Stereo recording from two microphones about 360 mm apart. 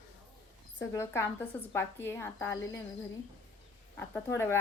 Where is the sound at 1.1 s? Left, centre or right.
Centre.